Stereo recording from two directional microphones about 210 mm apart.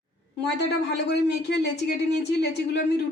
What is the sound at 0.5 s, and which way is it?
Speech, 55° left (ahead or behind).